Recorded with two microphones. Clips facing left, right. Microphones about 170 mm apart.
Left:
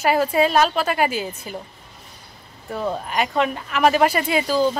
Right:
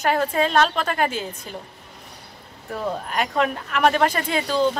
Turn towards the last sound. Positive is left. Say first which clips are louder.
# left 2 dB
turn(degrees=5)  # may be behind; listen again after turning